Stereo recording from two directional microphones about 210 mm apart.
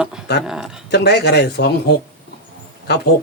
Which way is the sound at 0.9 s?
50° left (ahead or behind).